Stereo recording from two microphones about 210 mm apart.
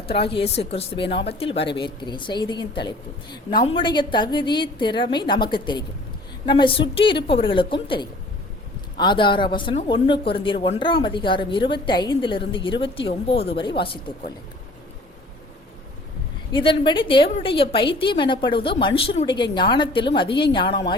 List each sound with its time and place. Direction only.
0.1 s speech: 25° left (ahead or behind)
16.5 s speech: 25° left (ahead or behind)